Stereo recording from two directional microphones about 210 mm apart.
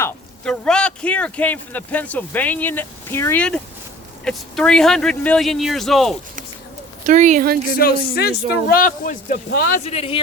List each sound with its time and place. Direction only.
0.0 s a man's voice: 5° left (ahead or behind)
7.0 s speech: 35° right (ahead or behind)
7.8 s speech: 45° left (ahead or behind)
9.8 s speech: 30° left (ahead or behind)